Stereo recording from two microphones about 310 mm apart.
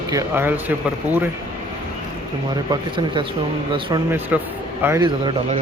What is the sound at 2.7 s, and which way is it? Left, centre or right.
A man's voice, centre.